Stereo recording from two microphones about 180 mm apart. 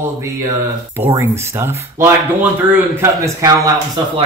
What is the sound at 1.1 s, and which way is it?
A man's voice, 15° right (ahead or behind).